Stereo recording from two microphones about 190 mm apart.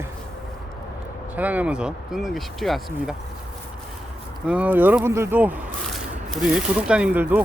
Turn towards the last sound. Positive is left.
turn(degrees=-10)  # may be behind; listen again after turning